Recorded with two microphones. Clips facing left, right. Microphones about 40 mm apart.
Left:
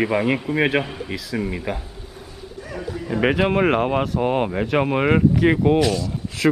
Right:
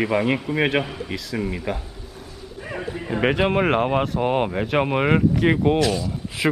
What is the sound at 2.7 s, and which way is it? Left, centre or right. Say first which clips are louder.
Speech: even; right.